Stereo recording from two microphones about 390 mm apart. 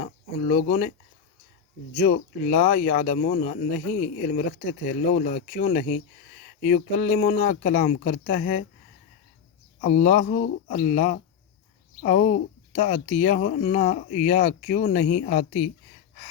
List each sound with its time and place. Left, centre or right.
0.0 s speech: centre
2.0 s speech: centre
9.8 s speech: centre